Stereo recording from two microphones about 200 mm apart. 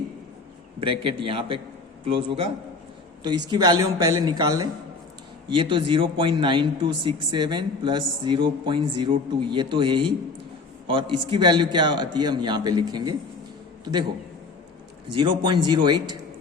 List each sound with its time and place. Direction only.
0.8 s a man's voice: 25° right (ahead or behind)
15.1 s a man's voice: 25° right (ahead or behind)